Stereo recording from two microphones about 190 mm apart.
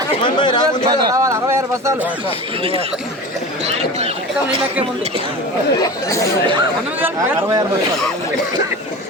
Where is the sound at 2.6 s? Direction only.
30° right (ahead or behind).